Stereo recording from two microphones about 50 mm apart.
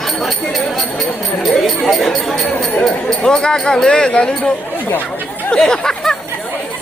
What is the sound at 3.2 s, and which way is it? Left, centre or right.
Speech, centre.